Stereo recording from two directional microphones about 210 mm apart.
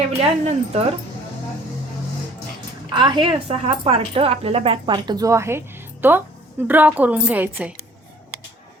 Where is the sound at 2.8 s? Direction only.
20° right (ahead or behind).